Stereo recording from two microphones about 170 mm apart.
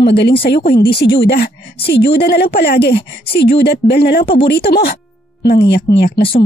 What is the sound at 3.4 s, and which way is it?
A woman's voice, 75° left (ahead or behind).